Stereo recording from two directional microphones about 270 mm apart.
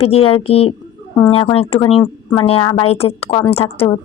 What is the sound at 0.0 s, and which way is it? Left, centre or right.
Speech, left.